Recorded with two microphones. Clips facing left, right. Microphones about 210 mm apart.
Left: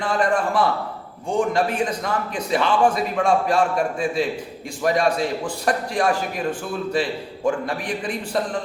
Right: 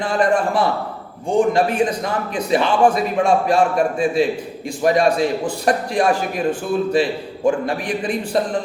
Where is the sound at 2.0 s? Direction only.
15° right (ahead or behind).